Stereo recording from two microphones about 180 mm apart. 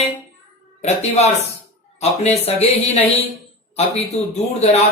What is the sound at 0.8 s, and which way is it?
Speech, 40° left (ahead or behind).